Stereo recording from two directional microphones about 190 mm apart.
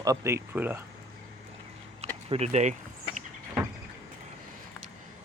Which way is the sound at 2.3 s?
35° right (ahead or behind).